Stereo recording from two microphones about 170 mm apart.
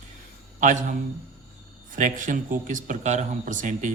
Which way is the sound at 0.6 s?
50° right (ahead or behind).